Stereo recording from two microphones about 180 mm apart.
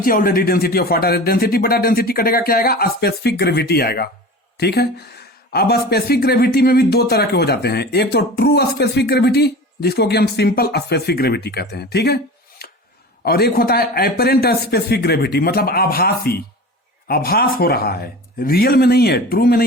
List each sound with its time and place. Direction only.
0.0 s speech: 55° left (ahead or behind)